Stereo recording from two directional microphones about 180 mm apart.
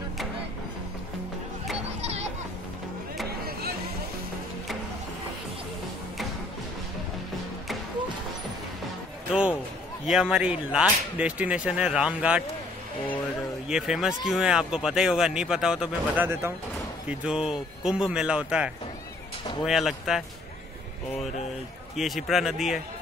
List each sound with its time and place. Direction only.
1.9 s children playing: 35° right (ahead or behind)
10.0 s a man's voice: 5° right (ahead or behind)
13.7 s a man's voice: 5° right (ahead or behind)
21.9 s a man's voice: centre (ahead or behind)